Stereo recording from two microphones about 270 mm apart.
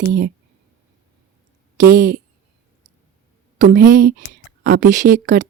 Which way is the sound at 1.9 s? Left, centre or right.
Right.